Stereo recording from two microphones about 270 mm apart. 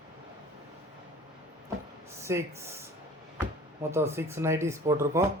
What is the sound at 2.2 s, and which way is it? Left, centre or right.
Speech, centre.